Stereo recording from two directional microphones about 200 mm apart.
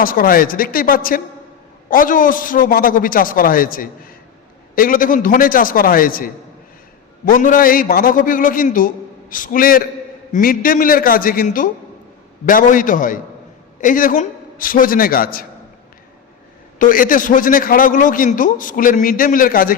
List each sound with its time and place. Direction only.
0.0 s a man's voice: 45° left (ahead or behind)
16.7 s a man's voice: 45° left (ahead or behind)